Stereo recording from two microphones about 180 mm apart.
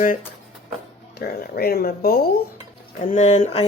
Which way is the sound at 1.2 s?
55° left (ahead or behind).